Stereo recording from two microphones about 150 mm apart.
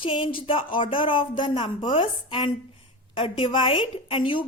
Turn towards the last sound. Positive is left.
turn(degrees=35)  # may be behind; listen again after turning